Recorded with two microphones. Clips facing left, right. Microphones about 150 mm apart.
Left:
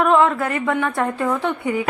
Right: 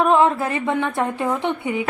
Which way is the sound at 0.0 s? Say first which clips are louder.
Even; 25° right (ahead or behind).